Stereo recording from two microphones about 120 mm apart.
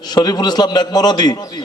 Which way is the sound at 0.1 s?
35° left (ahead or behind).